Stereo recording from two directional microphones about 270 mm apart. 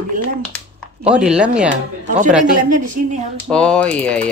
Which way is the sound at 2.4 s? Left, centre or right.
Right.